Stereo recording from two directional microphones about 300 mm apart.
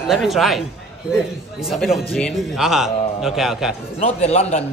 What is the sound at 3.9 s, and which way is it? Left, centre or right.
Speech, left.